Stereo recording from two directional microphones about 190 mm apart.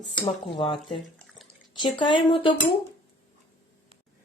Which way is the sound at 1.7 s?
25° left (ahead or behind).